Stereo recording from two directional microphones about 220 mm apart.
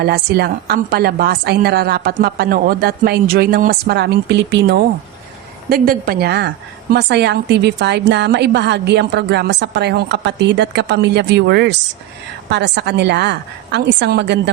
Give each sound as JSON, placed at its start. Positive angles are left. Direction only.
{"t": 0.0, "sound": "a woman's voice", "side_deg": -45}